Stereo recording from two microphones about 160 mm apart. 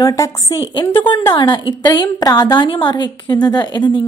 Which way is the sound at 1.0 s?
30° left (ahead or behind).